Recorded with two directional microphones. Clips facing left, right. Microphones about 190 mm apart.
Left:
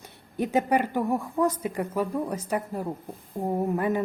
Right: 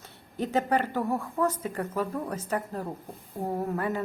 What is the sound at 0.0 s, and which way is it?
A woman's voice, 10° left (ahead or behind).